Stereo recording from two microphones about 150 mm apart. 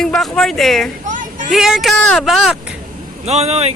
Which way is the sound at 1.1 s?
60° right (ahead or behind).